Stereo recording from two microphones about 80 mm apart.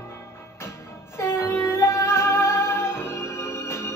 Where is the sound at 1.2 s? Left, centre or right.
Left.